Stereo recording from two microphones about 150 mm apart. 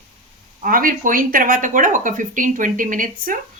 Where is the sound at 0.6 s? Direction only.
70° right (ahead or behind).